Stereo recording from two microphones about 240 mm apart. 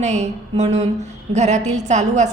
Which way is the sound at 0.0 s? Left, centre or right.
Right.